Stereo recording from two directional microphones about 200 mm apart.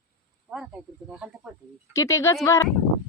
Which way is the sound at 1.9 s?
15° left (ahead or behind).